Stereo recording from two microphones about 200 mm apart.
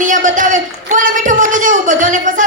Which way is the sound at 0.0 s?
40° right (ahead or behind).